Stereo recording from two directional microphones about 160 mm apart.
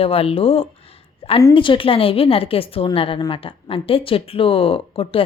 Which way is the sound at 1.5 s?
30° left (ahead or behind).